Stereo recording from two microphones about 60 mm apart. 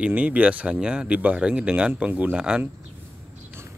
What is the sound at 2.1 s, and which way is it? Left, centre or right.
Speech, right.